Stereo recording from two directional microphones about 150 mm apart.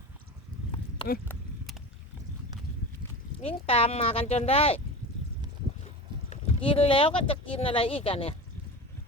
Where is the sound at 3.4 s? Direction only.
40° left (ahead or behind).